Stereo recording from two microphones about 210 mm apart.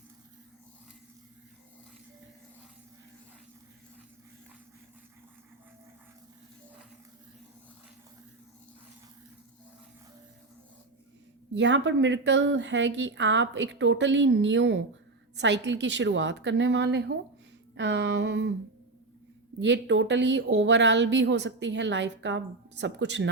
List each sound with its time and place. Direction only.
11.5 s speech: 60° right (ahead or behind)
19.5 s speech: 60° right (ahead or behind)